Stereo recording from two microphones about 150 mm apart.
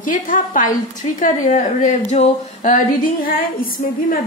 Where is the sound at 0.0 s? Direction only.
65° left (ahead or behind).